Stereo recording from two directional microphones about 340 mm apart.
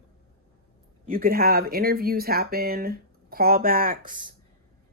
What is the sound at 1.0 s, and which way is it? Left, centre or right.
Speech, right.